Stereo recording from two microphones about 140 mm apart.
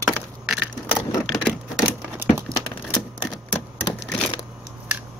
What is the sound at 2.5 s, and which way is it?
Typewriter, 30° left (ahead or behind).